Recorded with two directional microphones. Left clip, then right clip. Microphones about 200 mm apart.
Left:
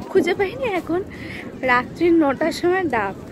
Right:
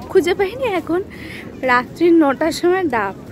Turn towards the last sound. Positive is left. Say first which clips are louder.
# right 3 dB
turn(degrees=-30)  # may be behind; listen again after turning